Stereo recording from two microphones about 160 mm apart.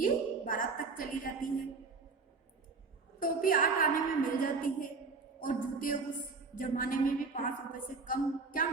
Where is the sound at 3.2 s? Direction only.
60° left (ahead or behind).